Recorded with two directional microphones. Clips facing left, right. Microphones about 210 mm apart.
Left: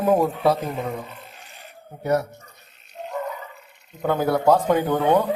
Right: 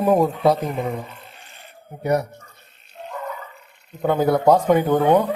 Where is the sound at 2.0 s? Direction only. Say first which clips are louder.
Right 1 dB; 15° right (ahead or behind).